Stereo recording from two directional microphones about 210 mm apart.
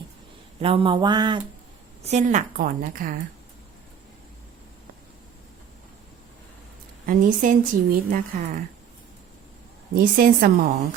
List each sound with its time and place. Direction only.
0.6 s a sound: 25° right (ahead or behind)
2.0 s a woman's voice: 35° right (ahead or behind)
7.0 s a woman's voice: 40° right (ahead or behind)
9.9 s a woman's voice: 40° right (ahead or behind)